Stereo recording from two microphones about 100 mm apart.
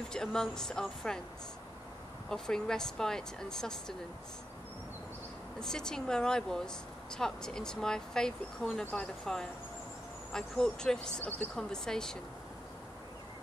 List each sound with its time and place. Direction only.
0.1 s speech: 5° left (ahead or behind)
2.2 s speech: 5° left (ahead or behind)
5.6 s speech: 5° left (ahead or behind)